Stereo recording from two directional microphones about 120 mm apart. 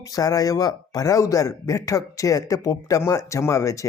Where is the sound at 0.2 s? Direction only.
30° left (ahead or behind).